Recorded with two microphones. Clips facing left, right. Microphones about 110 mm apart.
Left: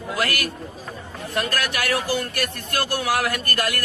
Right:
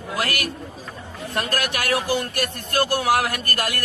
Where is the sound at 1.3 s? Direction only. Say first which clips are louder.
Even; 45° right (ahead or behind).